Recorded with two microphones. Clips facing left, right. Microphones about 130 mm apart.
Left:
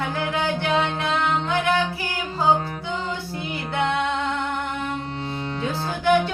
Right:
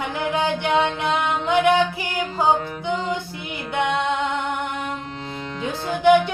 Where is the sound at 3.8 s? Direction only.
15° right (ahead or behind).